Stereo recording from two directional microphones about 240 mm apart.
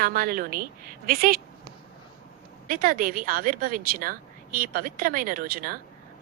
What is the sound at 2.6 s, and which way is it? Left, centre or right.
Speech, right.